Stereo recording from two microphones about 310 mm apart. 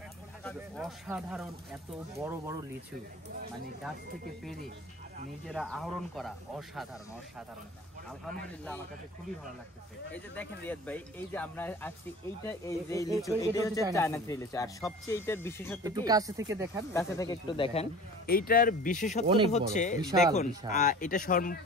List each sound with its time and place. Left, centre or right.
0.4 s speech: centre
5.5 s speech: centre
10.1 s speech: centre
15.8 s speech: centre
16.9 s speech: centre
18.2 s speech: left
19.2 s speech: centre
19.7 s speech: left
20.0 s speech: centre
20.7 s speech: left